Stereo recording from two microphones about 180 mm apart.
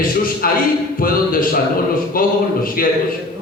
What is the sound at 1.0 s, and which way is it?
Music, 50° left (ahead or behind).